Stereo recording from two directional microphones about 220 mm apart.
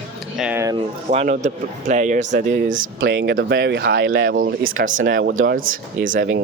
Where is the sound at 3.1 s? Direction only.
50° right (ahead or behind).